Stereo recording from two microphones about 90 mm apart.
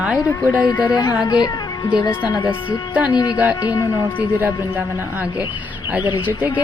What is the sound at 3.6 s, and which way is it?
Speech, 45° left (ahead or behind).